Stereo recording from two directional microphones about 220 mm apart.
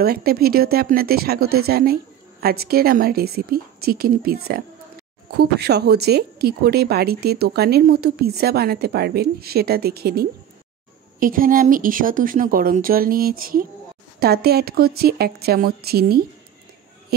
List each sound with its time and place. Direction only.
0.0 s a woman's voice: 45° right (ahead or behind)